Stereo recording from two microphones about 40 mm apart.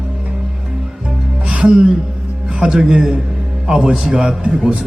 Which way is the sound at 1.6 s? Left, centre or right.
Centre.